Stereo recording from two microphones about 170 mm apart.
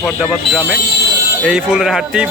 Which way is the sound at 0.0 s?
Centre (ahead or behind).